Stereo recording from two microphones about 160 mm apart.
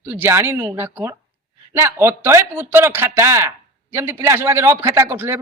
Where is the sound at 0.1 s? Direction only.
15° right (ahead or behind).